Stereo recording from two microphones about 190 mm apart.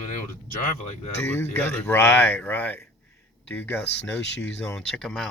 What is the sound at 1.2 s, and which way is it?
Speech, 10° left (ahead or behind).